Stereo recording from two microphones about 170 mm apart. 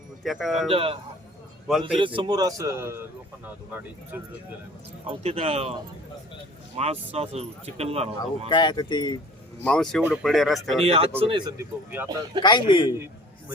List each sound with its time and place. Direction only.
0.2 s speech: centre (ahead or behind)
0.7 s a man's voice: 35° right (ahead or behind); by 4.2 s 10° right (ahead or behind)
5.0 s speech: 35° right (ahead or behind)
6.8 s speech: 40° right (ahead or behind)
8.4 s speech: 25° left (ahead or behind)
9.6 s speech: 5° left (ahead or behind)
10.8 s a man's voice: 35° right (ahead or behind)
11.5 s speech: 10° right (ahead or behind)
12.0 s a man's voice: 25° right (ahead or behind)
12.4 s speech: 25° left (ahead or behind)